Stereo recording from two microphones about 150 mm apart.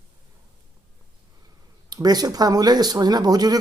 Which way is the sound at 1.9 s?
25° right (ahead or behind).